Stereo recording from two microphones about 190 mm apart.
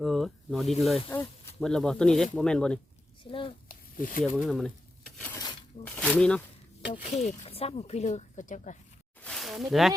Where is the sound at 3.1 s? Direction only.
25° left (ahead or behind).